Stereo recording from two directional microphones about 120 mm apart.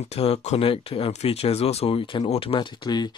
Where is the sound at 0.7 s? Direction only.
50° left (ahead or behind).